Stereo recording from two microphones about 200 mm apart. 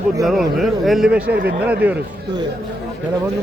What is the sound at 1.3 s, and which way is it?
Speech, 50° right (ahead or behind).